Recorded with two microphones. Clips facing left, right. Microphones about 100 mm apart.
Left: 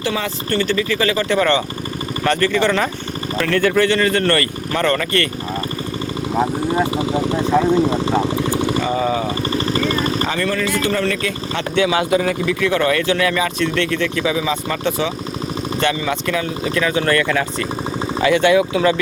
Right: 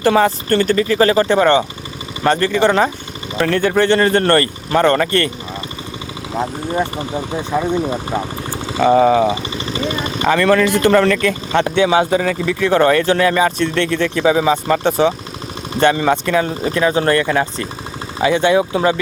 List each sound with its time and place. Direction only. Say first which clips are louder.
0.0 s speech: right 9 dB; 50° right (ahead or behind); by 5.3 s 30° right (ahead or behind)
6.7 s speech: left 2 dB; 15° left (ahead or behind)
7.5 s speech: left 2 dB; 5° right (ahead or behind)
8.5 s vehicle: left 5 dB; 65° left (ahead or behind)
8.8 s speech: right 8 dB; 55° right (ahead or behind)
9.5 s vehicle: left 3 dB; 50° left (ahead or behind)
10.3 s speech: right 7 dB; 65° right (ahead or behind); by 11.7 s 50° right (ahead or behind)
11.8 s speech: right 1 dB; 35° right (ahead or behind)
12.2 s speech: right 1 dB; 50° right (ahead or behind)
12.5 s speech: right 8 dB; 35° right (ahead or behind)
15.0 s speech: right 9 dB; 35° right (ahead or behind)
15.8 s speech: right 7 dB; 45° right (ahead or behind)